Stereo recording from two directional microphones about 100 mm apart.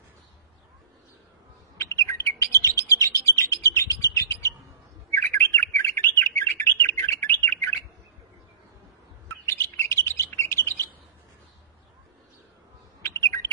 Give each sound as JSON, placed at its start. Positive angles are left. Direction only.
{"t": 1.8, "sound": "bird", "side_deg": 30}
{"t": 9.5, "sound": "chirp", "side_deg": 25}
{"t": 13.0, "sound": "bird", "side_deg": 30}